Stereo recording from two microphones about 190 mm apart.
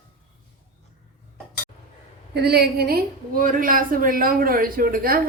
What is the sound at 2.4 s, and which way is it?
A woman's voice, 55° right (ahead or behind).